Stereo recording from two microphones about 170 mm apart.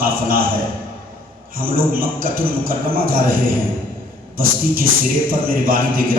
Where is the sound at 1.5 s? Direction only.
55° right (ahead or behind).